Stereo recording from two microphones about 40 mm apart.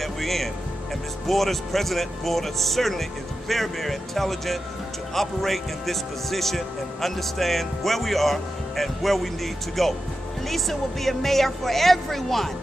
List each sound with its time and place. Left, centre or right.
0.0 s music: centre
1.2 s a man's voice: centre